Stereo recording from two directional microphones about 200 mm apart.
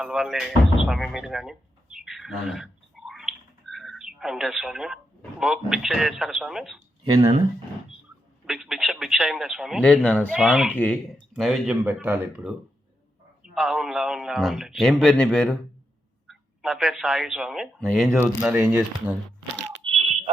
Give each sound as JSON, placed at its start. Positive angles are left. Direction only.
{"t": 0.0, "sound": "music", "side_deg": 0}
{"t": 5.4, "sound": "speech", "side_deg": 0}
{"t": 7.1, "sound": "speech", "side_deg": -35}
{"t": 8.4, "sound": "speech", "side_deg": 0}
{"t": 10.3, "sound": "speech", "side_deg": -5}
{"t": 10.7, "sound": "speech", "side_deg": 5}
{"t": 19.8, "sound": "fire alarm", "side_deg": -30}